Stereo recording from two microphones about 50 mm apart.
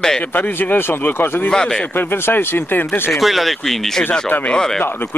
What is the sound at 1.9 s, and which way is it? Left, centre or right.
Speech, left.